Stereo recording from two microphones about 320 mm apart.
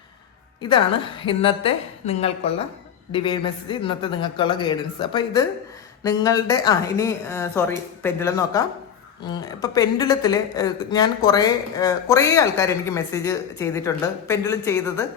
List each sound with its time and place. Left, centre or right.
0.6 s speech: centre